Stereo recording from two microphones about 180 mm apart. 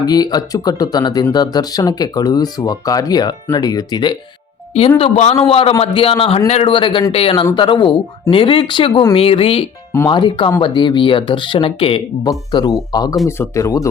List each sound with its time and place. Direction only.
0.0 s speech: 20° left (ahead or behind)
4.9 s speech: 35° left (ahead or behind); by 13.8 s 15° left (ahead or behind)